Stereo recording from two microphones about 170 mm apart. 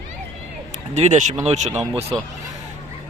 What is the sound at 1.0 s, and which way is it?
Speech, 40° right (ahead or behind).